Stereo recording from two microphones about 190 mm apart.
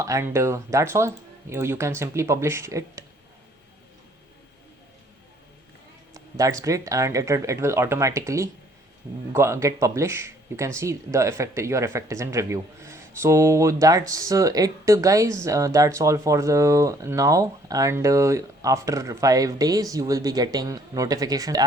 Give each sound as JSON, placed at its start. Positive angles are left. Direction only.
{"t": 0.0, "sound": "speech", "side_deg": -15}
{"t": 6.1, "sound": "speech", "side_deg": -20}